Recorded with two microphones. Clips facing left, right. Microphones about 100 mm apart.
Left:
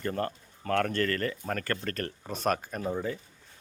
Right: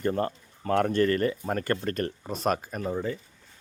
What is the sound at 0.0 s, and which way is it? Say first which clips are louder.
Speech: right 4 dB; 20° right (ahead or behind).